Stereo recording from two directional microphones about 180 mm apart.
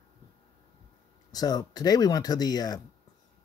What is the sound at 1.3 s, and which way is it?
Speech, 20° left (ahead or behind).